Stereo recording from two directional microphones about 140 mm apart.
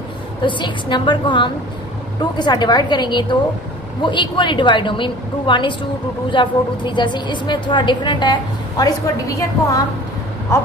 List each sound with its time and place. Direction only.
0.4 s a woman's voice: 35° left (ahead or behind)
10.5 s owl: 20° left (ahead or behind)